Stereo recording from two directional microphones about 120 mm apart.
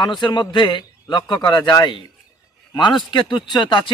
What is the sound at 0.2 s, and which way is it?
A man's voice, 40° left (ahead or behind).